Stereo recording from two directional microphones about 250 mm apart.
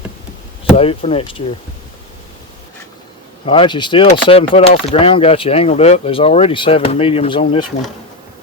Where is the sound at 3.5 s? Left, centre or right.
Centre.